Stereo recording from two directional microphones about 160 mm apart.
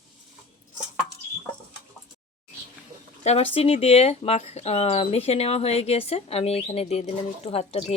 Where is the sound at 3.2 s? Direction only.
40° left (ahead or behind).